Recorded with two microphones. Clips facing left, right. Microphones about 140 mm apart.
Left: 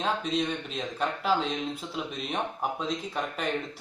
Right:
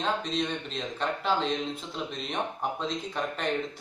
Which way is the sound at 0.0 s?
5° left (ahead or behind).